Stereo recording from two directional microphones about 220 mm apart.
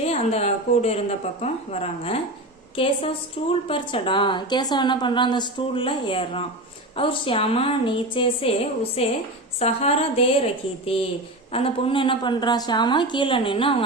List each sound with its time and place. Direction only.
0.0 s a woman's voice: 30° left (ahead or behind)
11.5 s a woman's voice: 25° left (ahead or behind)